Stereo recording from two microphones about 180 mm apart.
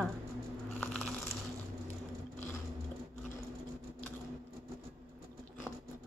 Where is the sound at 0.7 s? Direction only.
5° left (ahead or behind).